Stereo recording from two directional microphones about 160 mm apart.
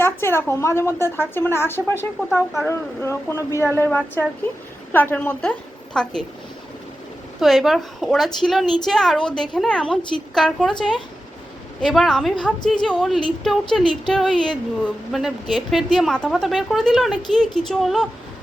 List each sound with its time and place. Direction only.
0.0 s a woman's voice: 15° left (ahead or behind)
7.3 s speech: centre (ahead or behind)